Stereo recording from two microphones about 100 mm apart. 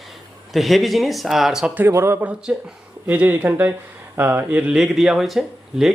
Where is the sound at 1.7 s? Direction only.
20° right (ahead or behind).